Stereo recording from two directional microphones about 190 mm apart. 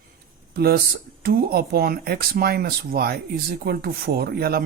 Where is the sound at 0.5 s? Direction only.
55° right (ahead or behind).